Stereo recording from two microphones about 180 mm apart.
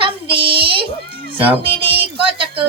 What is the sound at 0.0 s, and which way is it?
Child singing, 30° right (ahead or behind).